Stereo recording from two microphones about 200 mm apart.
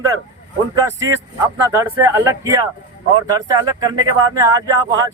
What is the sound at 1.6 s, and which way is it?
Speech, 15° right (ahead or behind).